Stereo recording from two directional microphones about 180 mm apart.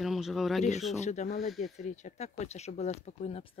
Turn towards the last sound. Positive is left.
turn(degrees=35)  # may be behind; listen again after turning